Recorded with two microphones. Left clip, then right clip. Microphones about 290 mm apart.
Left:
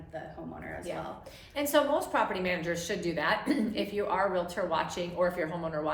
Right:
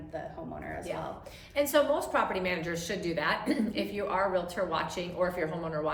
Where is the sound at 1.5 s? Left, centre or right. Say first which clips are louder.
Right 1 dB; centre.